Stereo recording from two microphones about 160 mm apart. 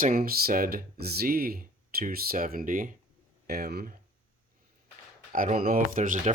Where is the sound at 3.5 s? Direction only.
75° right (ahead or behind).